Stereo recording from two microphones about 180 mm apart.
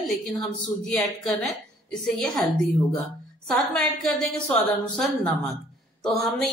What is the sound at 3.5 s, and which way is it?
A woman's voice, centre (ahead or behind).